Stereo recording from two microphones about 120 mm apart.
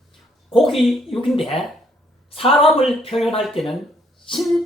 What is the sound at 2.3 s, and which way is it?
Speech, 55° left (ahead or behind).